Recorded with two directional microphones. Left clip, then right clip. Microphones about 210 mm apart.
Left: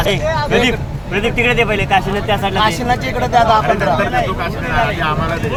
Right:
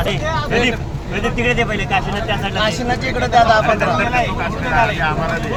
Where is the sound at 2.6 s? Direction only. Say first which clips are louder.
Left 3 dB; 25° left (ahead or behind).